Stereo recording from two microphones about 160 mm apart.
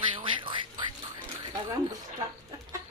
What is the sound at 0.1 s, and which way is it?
Quack, 30° right (ahead or behind).